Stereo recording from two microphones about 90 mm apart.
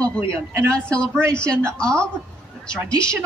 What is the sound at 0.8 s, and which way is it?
Speech, 10° left (ahead or behind).